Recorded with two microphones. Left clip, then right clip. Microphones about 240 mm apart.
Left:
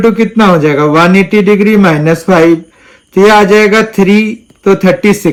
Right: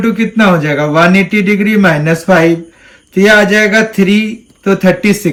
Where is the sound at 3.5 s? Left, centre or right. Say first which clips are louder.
Left 3 dB; centre.